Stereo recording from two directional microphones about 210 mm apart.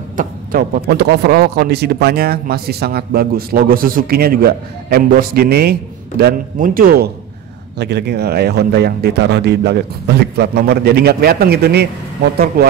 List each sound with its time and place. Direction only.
0.2 s speech: 40° right (ahead or behind)